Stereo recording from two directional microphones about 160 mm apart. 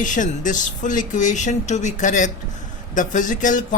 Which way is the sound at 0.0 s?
50° left (ahead or behind).